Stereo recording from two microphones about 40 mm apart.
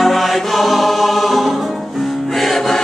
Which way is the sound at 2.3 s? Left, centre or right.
Centre.